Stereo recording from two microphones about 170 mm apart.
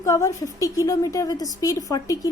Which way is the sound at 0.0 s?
20° left (ahead or behind).